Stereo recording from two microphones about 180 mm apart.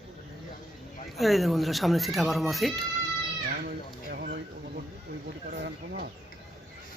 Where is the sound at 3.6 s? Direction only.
55° right (ahead or behind).